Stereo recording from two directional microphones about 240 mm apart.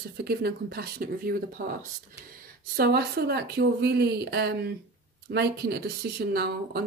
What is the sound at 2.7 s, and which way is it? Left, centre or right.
Speech, right.